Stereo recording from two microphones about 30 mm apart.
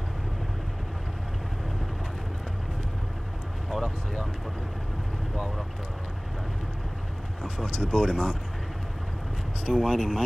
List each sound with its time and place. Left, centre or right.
3.7 s a sound: centre
7.4 s speech: right
9.8 s speech: centre